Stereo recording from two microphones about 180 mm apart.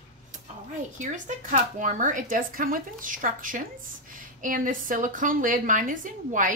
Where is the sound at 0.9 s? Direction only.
45° right (ahead or behind).